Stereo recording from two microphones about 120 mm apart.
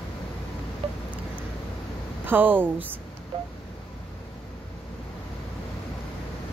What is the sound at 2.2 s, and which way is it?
Speech, 15° right (ahead or behind).